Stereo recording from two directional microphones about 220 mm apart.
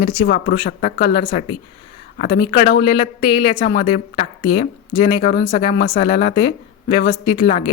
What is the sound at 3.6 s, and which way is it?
Speech, 25° left (ahead or behind).